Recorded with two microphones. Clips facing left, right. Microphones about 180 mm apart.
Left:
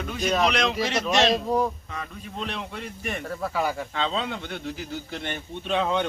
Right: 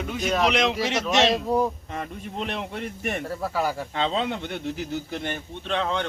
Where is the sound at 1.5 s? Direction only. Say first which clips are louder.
Right 1 dB; 10° right (ahead or behind).